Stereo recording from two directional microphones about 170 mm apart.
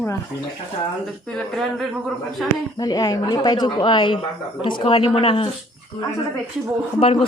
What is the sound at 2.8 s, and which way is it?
Speech, 20° left (ahead or behind).